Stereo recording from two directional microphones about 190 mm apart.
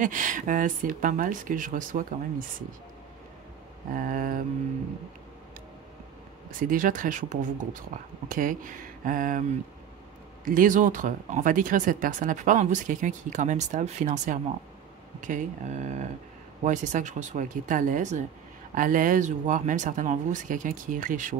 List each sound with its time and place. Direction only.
0.0 s speech: 45° right (ahead or behind)
3.9 s speech: 45° right (ahead or behind)
6.6 s speech: 45° right (ahead or behind)
10.4 s speech: 45° right (ahead or behind)